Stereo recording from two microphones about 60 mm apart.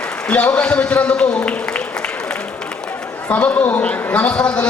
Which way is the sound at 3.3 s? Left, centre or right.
Left.